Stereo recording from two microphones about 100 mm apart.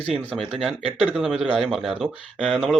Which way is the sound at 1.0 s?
5° right (ahead or behind).